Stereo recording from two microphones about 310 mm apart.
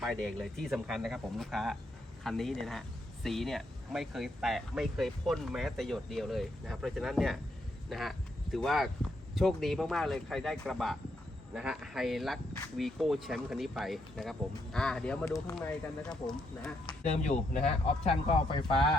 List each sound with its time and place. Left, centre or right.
0.0 s speech: centre
16.8 s speech: left